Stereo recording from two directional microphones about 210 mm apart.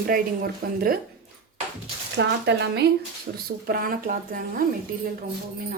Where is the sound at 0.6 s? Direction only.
45° right (ahead or behind).